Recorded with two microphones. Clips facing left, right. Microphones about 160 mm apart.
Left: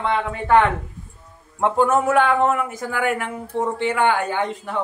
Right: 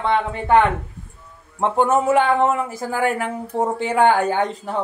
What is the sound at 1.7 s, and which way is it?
Speech, 25° right (ahead or behind).